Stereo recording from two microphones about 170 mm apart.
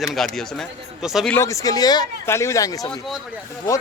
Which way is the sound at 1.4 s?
20° left (ahead or behind).